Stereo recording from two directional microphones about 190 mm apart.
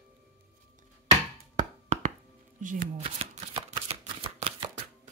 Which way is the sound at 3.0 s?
30° right (ahead or behind).